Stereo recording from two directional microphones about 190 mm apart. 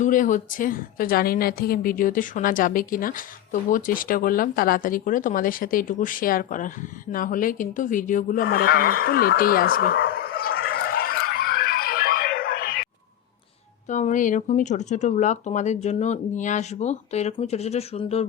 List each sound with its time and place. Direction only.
0.0 s a woman's voice: 45° left (ahead or behind)
9.8 s a sound: 55° left (ahead or behind)
13.9 s speech: 40° left (ahead or behind)